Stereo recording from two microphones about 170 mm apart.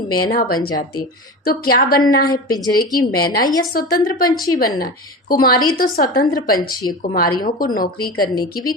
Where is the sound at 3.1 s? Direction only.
60° left (ahead or behind).